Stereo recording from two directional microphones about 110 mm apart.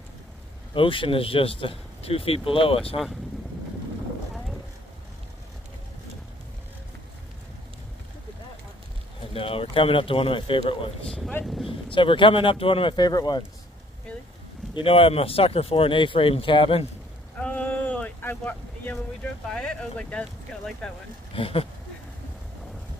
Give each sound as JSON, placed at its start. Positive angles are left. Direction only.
{"t": 0.7, "sound": "speech", "side_deg": 50}
{"t": 9.3, "sound": "speech", "side_deg": 60}
{"t": 11.1, "sound": "speech", "side_deg": 5}
{"t": 11.9, "sound": "speech", "side_deg": 50}
{"t": 14.7, "sound": "speech", "side_deg": 55}
{"t": 17.4, "sound": "boat", "side_deg": 10}
{"t": 19.5, "sound": "speech", "side_deg": 10}
{"t": 21.3, "sound": "speech", "side_deg": 60}